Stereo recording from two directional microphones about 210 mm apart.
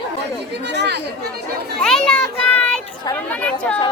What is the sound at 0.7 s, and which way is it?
Speech, 55° right (ahead or behind).